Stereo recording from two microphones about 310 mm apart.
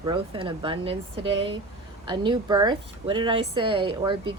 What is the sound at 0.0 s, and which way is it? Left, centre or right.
A woman's voice, centre.